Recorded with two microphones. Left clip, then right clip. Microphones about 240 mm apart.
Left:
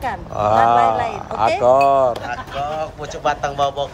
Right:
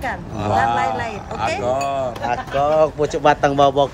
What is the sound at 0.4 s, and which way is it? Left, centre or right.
Speech, left.